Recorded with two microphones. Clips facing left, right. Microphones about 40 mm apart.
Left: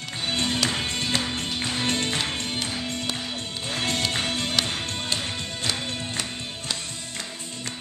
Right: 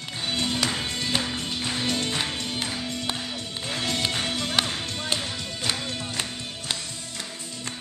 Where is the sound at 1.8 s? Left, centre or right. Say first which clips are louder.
Left 2 dB; left.